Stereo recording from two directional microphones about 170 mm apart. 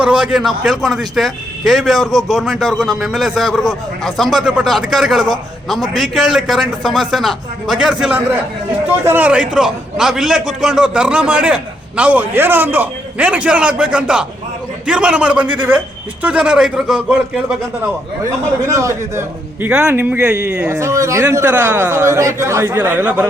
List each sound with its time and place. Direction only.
0.0 s a man's voice: 5° right (ahead or behind)
18.6 s a man's voice: 20° right (ahead or behind)
20.7 s a man's voice: 15° right (ahead or behind)